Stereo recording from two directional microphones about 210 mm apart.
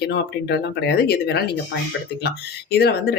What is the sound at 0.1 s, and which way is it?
Speech, 50° left (ahead or behind).